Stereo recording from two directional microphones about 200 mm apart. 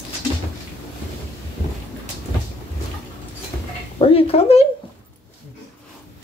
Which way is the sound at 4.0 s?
30° left (ahead or behind).